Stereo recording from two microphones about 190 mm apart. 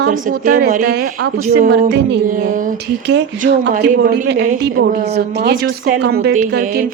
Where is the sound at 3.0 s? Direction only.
65° right (ahead or behind).